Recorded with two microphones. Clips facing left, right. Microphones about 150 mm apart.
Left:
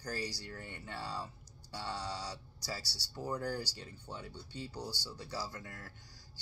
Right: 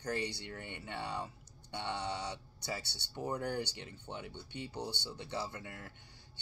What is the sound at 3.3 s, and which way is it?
Speech, 60° right (ahead or behind).